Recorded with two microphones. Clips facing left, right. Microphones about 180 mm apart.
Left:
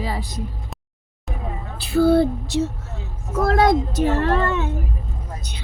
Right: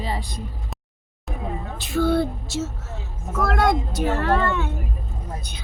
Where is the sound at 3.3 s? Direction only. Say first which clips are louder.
Left 4 dB; 25° left (ahead or behind).